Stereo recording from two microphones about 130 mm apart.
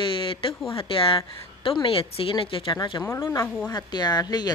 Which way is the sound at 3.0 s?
20° left (ahead or behind).